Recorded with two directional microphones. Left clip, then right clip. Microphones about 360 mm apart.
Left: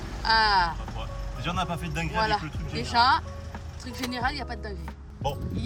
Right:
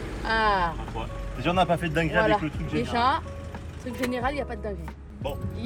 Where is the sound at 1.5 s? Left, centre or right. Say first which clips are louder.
Right 8 dB; centre.